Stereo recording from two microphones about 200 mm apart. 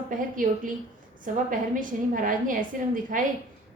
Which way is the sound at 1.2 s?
40° right (ahead or behind).